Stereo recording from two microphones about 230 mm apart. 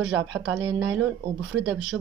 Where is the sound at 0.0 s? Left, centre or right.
Right.